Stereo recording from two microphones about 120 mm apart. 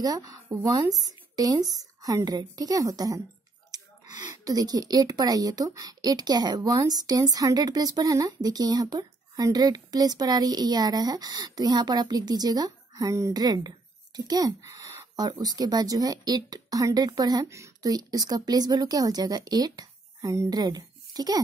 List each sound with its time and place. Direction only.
0.0 s speech: 30° right (ahead or behind)